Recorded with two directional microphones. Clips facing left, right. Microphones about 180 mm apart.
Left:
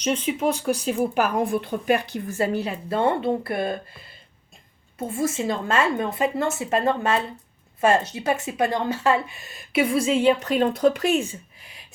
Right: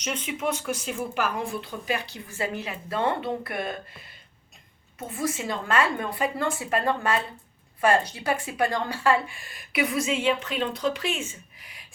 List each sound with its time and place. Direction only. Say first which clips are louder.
0.0 s speech: left 6 dB; 30° left (ahead or behind)
1.5 s speech: left 8 dB; 55° left (ahead or behind); by 3.8 s 30° left (ahead or behind)
4.9 s speech: left 5 dB; 30° left (ahead or behind)